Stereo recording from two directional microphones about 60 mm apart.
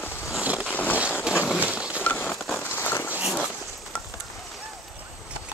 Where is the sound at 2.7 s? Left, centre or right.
Left.